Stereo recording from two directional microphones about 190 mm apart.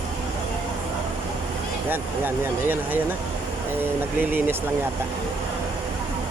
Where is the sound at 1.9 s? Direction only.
10° right (ahead or behind).